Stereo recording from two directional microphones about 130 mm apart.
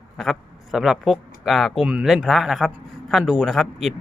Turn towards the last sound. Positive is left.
turn(degrees=0)  # may be behind; listen again after turning